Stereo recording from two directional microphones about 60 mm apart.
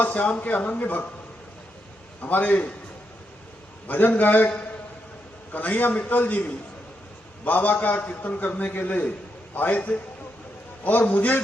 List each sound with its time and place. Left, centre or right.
0.0 s a man's voice: left
2.2 s a man's voice: left
3.8 s a man's voice: left